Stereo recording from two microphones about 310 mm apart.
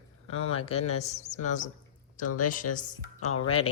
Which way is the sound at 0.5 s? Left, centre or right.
Centre.